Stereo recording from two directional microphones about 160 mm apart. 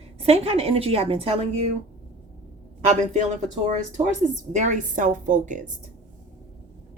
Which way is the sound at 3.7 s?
50° right (ahead or behind).